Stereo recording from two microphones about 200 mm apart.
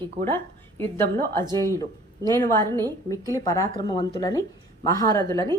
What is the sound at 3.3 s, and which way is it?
Speech, 15° left (ahead or behind).